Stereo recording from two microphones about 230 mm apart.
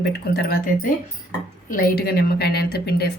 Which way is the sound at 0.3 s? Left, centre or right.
Left.